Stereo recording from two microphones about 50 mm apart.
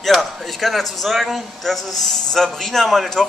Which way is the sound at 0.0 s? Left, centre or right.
Centre.